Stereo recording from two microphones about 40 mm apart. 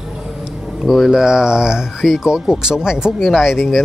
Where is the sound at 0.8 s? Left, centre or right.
Centre.